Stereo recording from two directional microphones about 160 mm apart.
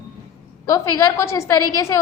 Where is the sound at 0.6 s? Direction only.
20° left (ahead or behind).